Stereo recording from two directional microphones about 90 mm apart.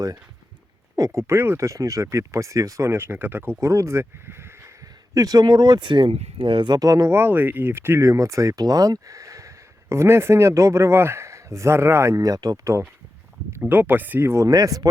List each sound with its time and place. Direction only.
0.9 s speech: 35° right (ahead or behind)
7.1 s speech: 25° right (ahead or behind); by 12.7 s 45° right (ahead or behind)
13.6 s speech: 20° right (ahead or behind)
14.4 s speech: 40° right (ahead or behind)